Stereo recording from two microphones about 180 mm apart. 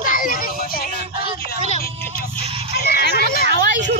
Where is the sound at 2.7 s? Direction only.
65° left (ahead or behind).